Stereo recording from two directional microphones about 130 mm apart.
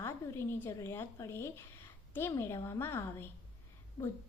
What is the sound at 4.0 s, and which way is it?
Speech, 30° left (ahead or behind).